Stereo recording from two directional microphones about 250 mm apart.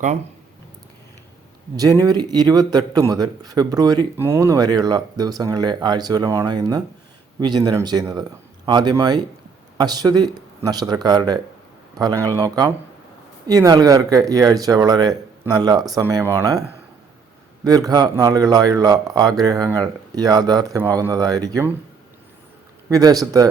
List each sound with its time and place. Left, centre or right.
1.7 s speech: centre
22.9 s speech: centre